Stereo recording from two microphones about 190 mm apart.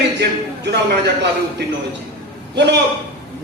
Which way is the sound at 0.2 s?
60° right (ahead or behind).